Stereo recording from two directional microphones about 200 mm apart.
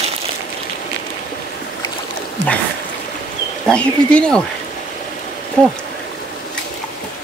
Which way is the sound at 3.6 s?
5° left (ahead or behind).